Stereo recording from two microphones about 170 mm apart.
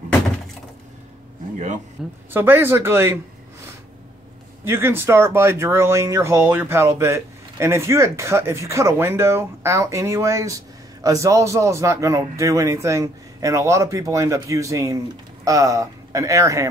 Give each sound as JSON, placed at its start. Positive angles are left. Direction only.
{"t": 2.0, "sound": "a woman's voice", "side_deg": -5}
{"t": 4.6, "sound": "speech", "side_deg": -15}